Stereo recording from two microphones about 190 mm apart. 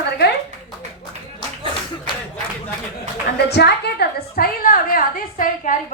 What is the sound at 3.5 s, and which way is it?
A woman's voice, 60° left (ahead or behind).